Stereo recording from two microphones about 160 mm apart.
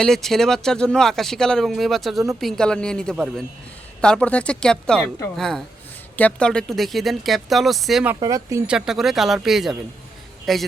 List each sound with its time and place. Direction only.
0.0 s speech: centre (ahead or behind)
8.1 s speech: 20° right (ahead or behind)
8.6 s a man's voice: 5° right (ahead or behind)